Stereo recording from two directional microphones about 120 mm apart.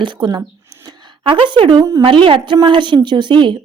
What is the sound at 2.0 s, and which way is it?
Speech, 45° right (ahead or behind).